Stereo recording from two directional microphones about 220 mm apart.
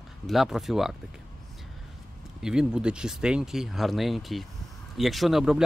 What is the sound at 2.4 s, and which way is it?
Speech, 5° right (ahead or behind).